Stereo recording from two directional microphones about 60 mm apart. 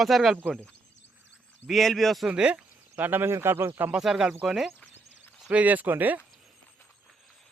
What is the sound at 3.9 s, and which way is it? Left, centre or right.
Speech, centre.